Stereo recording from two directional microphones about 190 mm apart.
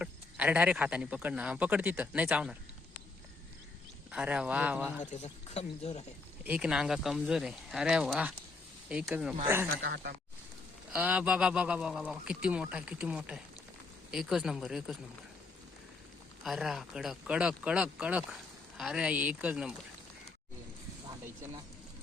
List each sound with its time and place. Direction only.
0.0 s speech: 5° right (ahead or behind)
4.1 s speech: 5° right (ahead or behind)
4.9 s speech: 35° left (ahead or behind)
6.4 s speech: 5° right (ahead or behind)
9.8 s speech: 60° right (ahead or behind)
10.9 s speech: 5° right (ahead or behind)
16.4 s speech: centre (ahead or behind)